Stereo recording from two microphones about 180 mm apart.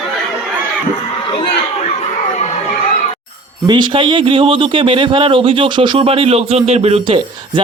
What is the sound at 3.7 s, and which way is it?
A man's voice, 25° right (ahead or behind).